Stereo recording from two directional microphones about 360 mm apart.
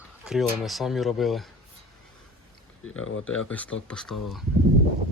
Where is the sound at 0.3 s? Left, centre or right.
Centre.